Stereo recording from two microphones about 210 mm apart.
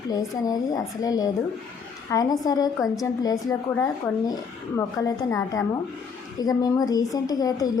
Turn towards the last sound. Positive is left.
turn(degrees=15)  # may be behind; listen again after turning